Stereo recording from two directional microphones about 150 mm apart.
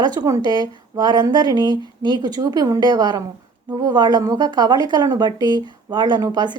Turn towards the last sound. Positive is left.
turn(degrees=-30)  # may be behind; listen again after turning